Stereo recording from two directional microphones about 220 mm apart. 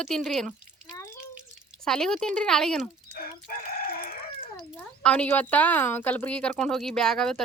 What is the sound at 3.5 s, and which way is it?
Chicken, 40° left (ahead or behind).